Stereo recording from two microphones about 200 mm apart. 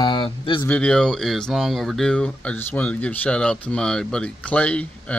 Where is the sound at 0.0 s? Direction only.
25° left (ahead or behind).